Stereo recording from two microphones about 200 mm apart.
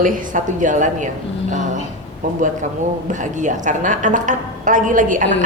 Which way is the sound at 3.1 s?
40° right (ahead or behind).